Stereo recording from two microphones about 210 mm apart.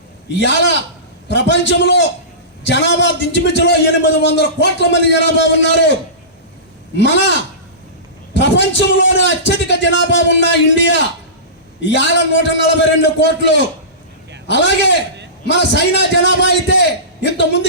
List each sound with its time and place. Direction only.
0.3 s a man's voice: 55° left (ahead or behind)
6.9 s a man's voice: 55° left (ahead or behind)